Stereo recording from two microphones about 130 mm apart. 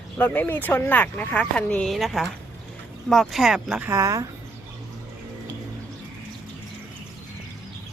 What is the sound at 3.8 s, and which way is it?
Speech, 25° right (ahead or behind).